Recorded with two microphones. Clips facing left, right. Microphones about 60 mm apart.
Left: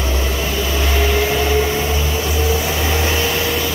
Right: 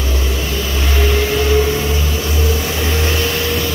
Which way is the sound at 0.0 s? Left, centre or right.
Centre.